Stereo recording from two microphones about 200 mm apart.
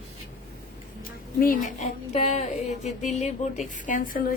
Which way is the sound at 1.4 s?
40° left (ahead or behind).